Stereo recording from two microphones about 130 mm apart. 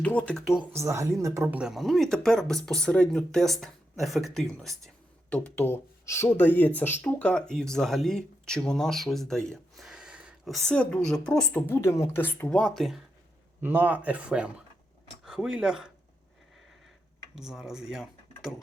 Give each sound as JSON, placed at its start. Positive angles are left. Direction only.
{"t": 0.0, "sound": "speech", "side_deg": 10}
{"t": 0.8, "sound": "speech", "side_deg": -20}
{"t": 1.5, "sound": "speech", "side_deg": -5}
{"t": 5.3, "sound": "speech", "side_deg": 15}
{"t": 12.5, "sound": "speech", "side_deg": 5}
{"t": 13.6, "sound": "speech", "side_deg": -15}
{"t": 17.3, "sound": "speech", "side_deg": -5}